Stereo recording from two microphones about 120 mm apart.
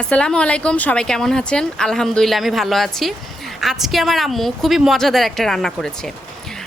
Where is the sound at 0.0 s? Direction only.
10° left (ahead or behind).